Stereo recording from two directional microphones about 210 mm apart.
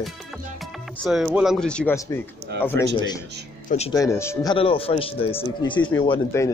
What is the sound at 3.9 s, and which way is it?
Speech, 15° left (ahead or behind).